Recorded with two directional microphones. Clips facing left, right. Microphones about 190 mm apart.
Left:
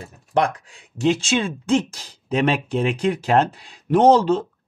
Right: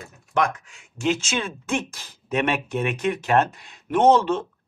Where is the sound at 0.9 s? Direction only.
35° left (ahead or behind).